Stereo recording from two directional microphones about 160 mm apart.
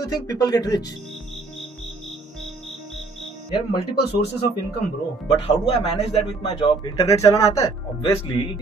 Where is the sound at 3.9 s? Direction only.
90° left.